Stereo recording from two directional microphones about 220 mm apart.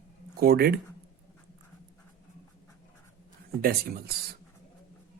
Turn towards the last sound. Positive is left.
turn(degrees=-45)  # may be behind; listen again after turning